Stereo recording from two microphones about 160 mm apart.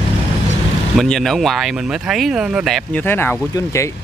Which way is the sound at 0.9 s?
5° left (ahead or behind).